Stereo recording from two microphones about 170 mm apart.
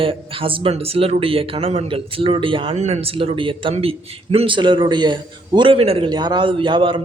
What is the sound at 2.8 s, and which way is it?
A man's voice, 40° right (ahead or behind).